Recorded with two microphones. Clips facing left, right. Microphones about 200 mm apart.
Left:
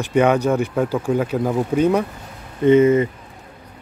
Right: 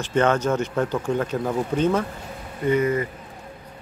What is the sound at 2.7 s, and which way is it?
Speech, 25° left (ahead or behind).